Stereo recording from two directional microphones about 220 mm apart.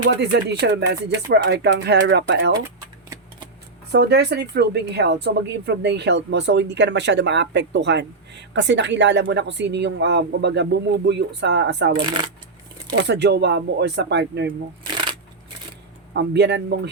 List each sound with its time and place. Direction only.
0.2 s speech: 50° right (ahead or behind)
3.9 s speech: 50° right (ahead or behind)
13.1 s speech: 50° right (ahead or behind)
16.1 s speech: 50° right (ahead or behind)